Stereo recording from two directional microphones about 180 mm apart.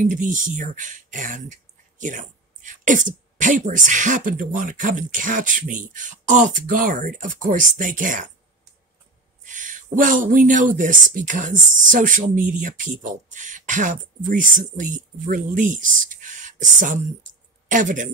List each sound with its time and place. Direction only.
0.0 s speech: 45° right (ahead or behind)
9.4 s speech: 45° right (ahead or behind)